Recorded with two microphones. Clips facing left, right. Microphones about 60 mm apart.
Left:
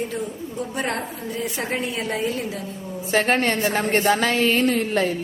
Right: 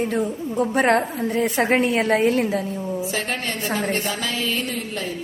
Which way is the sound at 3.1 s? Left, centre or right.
Left.